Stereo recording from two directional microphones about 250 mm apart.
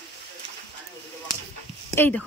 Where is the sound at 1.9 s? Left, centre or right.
Centre.